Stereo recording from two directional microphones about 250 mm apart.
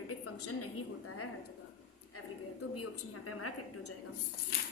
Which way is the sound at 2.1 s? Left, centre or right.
Left.